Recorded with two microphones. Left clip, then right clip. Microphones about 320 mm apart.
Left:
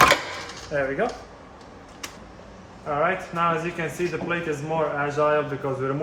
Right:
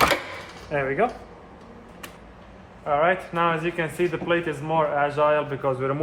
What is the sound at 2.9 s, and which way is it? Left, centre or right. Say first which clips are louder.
A man's voice: right 3 dB; right.